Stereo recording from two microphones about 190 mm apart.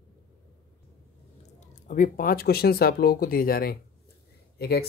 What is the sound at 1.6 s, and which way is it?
Speech, 40° left (ahead or behind).